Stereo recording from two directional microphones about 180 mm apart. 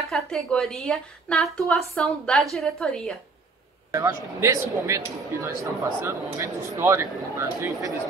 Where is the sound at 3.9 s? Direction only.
15° right (ahead or behind).